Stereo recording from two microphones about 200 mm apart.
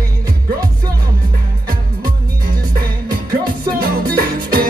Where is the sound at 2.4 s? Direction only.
50° right (ahead or behind).